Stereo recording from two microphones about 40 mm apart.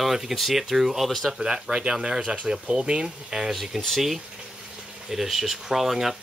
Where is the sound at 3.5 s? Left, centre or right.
Centre.